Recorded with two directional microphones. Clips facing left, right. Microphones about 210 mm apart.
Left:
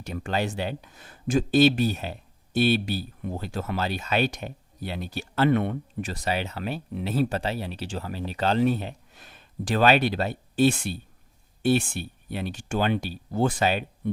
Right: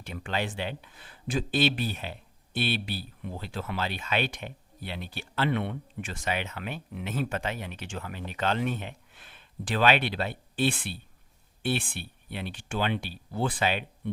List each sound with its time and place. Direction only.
0.0 s speech: 40° left (ahead or behind)